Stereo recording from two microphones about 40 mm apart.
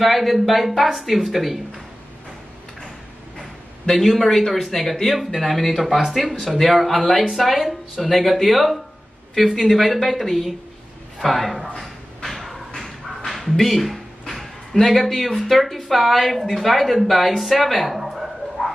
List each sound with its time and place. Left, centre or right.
0.0 s speech: centre
3.9 s a man's voice: centre
12.2 s a sound: centre
13.3 s speech: centre